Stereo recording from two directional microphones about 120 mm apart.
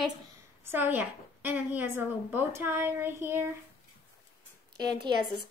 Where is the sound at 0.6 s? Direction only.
15° right (ahead or behind).